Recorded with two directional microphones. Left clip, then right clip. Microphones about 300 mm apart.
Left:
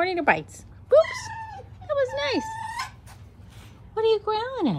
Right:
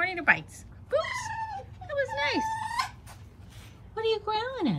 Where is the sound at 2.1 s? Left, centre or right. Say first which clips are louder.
Left 2 dB; centre.